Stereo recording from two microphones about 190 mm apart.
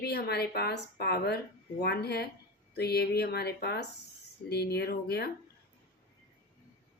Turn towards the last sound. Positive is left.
turn(degrees=55)  # may be behind; listen again after turning